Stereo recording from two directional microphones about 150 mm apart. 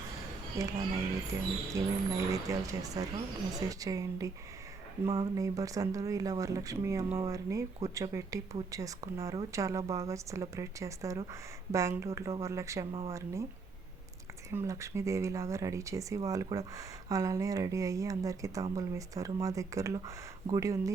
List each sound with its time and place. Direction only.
0.6 s speech: 20° right (ahead or behind)
5.3 s speech: 20° right (ahead or behind)
14.5 s speech: 20° right (ahead or behind)